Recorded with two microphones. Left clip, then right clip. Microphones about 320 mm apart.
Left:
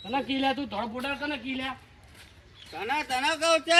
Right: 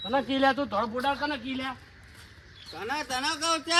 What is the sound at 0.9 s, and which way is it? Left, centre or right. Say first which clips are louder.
Speech: right 4 dB; centre.